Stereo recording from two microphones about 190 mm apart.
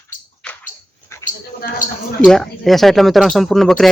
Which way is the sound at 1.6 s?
45° left (ahead or behind).